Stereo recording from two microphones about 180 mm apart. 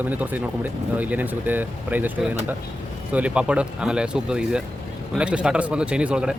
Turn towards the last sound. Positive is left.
turn(degrees=-5)  # may be behind; listen again after turning